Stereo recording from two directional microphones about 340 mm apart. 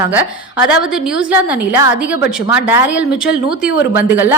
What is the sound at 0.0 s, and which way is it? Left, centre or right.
A woman's voice, centre.